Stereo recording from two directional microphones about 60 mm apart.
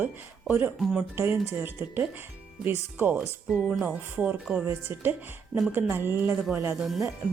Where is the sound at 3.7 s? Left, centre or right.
Right.